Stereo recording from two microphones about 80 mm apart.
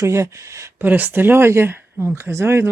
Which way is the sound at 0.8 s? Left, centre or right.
Right.